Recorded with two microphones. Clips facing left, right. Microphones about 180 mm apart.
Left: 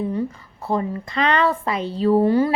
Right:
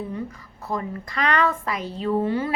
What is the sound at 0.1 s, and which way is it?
A woman's voice, 30° left (ahead or behind).